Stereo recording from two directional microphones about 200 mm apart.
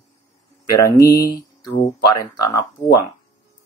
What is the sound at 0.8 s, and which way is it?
Speech, 15° left (ahead or behind).